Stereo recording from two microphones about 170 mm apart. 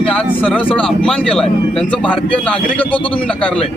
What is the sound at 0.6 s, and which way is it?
Speech, 30° left (ahead or behind).